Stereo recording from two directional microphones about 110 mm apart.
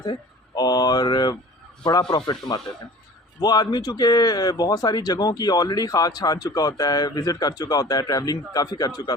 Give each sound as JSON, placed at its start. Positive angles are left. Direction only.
{"t": 0.0, "sound": "speech", "side_deg": 40}